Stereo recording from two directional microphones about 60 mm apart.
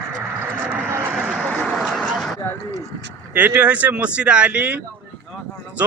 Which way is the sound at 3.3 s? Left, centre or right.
Right.